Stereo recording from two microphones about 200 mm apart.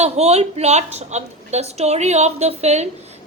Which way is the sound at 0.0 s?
30° right (ahead or behind).